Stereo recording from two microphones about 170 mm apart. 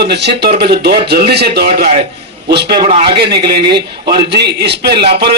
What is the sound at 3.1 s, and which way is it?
Speech, 75° right (ahead or behind).